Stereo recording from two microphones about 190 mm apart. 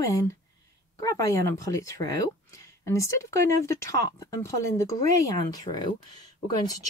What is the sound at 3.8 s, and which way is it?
Speech, 15° left (ahead or behind).